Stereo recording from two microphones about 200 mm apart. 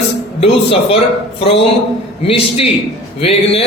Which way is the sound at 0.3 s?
30° left (ahead or behind).